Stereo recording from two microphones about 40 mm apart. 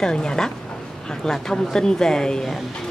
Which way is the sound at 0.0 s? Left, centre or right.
Centre.